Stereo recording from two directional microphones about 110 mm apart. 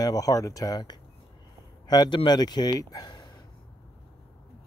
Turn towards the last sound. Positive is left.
turn(degrees=35)  # may be behind; listen again after turning